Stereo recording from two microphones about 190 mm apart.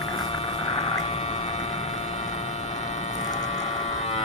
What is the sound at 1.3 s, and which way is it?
Vehicle, 40° left (ahead or behind).